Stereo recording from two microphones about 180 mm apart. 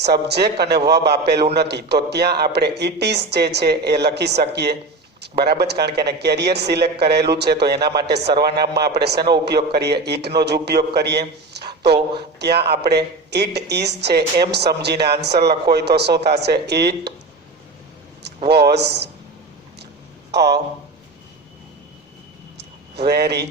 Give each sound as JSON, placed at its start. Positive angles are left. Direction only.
{"t": 0.0, "sound": "a man's voice", "side_deg": -65}
{"t": 18.4, "sound": "a man's voice", "side_deg": -65}
{"t": 20.3, "sound": "a man's voice", "side_deg": -65}
{"t": 22.5, "sound": "a sound", "side_deg": -65}